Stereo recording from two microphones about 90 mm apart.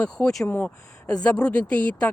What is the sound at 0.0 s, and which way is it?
Speech, 10° left (ahead or behind).